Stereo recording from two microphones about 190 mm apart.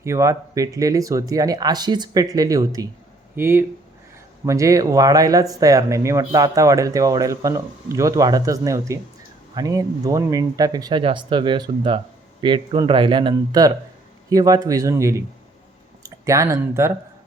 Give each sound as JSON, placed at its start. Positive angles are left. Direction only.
{"t": 0.0, "sound": "speech", "side_deg": -15}